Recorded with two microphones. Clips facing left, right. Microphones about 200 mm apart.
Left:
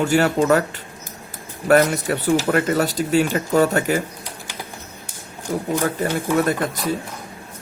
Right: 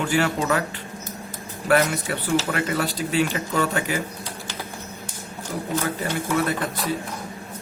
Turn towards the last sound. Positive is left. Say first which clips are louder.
# left 4 dB
turn(degrees=45)  # may be behind; listen again after turning